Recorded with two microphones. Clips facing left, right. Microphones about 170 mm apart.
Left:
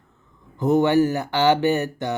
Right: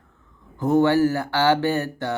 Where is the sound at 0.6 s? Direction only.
20° left (ahead or behind).